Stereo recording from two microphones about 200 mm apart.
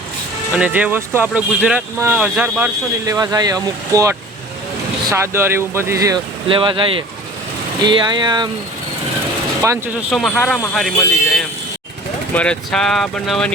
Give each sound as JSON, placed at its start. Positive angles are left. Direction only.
{"t": 0.5, "sound": "speech", "side_deg": -5}
{"t": 3.1, "sound": "speech", "side_deg": -20}
{"t": 9.6, "sound": "speech", "side_deg": -15}
{"t": 10.1, "sound": "speech", "side_deg": 0}